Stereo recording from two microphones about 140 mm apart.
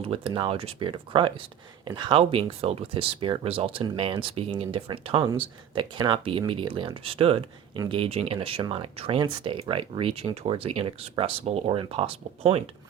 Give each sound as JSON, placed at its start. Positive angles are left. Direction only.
{"t": 0.0, "sound": "speech", "side_deg": -40}